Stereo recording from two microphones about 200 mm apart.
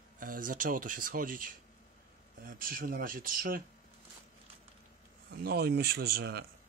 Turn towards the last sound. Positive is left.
turn(degrees=-55)  # may be behind; listen again after turning